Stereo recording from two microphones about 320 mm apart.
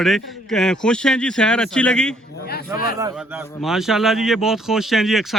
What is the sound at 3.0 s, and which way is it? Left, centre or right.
A man's voice, centre.